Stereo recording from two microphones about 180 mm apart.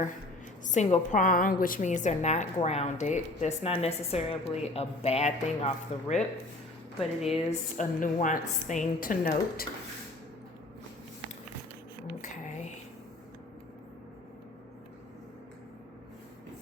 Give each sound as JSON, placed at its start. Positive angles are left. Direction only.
{"t": 0.6, "sound": "a woman's voice", "side_deg": 40}
{"t": 7.0, "sound": "speech", "side_deg": 0}
{"t": 7.8, "sound": "a woman's voice", "side_deg": 45}